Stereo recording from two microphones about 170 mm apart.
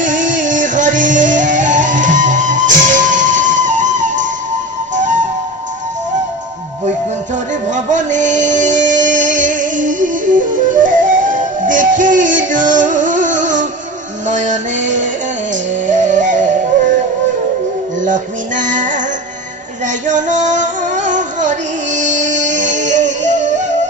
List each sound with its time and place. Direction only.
0.3 s music: 50° right (ahead or behind)
7.5 s music: 45° right (ahead or behind)
18.0 s music: 50° right (ahead or behind)
19.8 s female singing: 45° right (ahead or behind)